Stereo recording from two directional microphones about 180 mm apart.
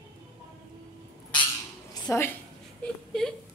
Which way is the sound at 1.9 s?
15° left (ahead or behind).